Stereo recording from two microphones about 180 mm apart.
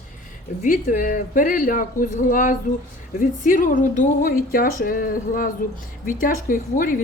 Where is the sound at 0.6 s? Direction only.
45° left (ahead or behind).